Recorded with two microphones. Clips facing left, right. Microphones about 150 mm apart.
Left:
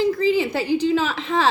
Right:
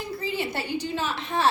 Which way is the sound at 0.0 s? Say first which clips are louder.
Left 11 dB; 90° left.